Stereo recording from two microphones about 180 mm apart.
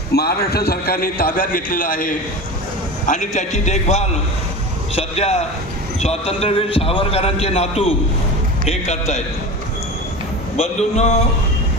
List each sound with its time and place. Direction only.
0.1 s a man's voice: 60° left (ahead or behind); by 9.2 s 35° left (ahead or behind)
10.6 s a man's voice: 35° left (ahead or behind)